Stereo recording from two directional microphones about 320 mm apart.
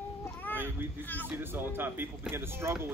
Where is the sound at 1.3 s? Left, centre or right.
Centre.